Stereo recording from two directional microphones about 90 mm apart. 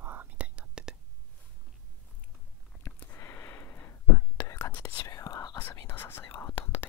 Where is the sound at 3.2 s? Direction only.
30° left (ahead or behind).